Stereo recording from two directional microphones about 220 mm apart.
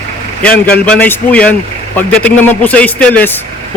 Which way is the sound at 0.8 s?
5° left (ahead or behind).